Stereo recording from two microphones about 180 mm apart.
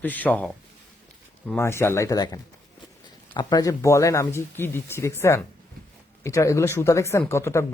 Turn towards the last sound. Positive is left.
turn(degrees=15)  # may be behind; listen again after turning